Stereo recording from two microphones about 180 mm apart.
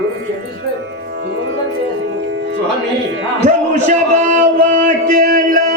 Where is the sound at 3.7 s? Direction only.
40° right (ahead or behind).